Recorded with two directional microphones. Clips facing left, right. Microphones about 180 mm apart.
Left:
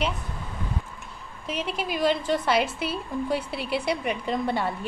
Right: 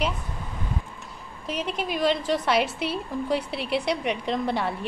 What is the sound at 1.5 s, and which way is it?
A woman's voice, centre (ahead or behind).